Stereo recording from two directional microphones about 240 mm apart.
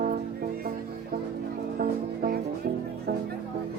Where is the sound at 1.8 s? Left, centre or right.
Right.